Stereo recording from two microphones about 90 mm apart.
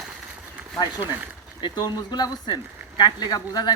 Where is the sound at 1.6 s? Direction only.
55° left (ahead or behind).